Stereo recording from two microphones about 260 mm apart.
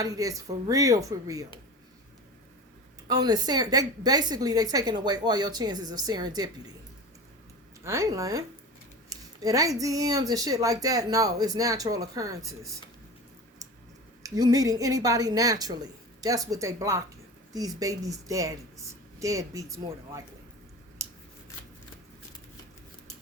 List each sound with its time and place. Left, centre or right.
0.0 s speech: centre
3.1 s speech: centre
7.9 s speech: centre
14.2 s speech: centre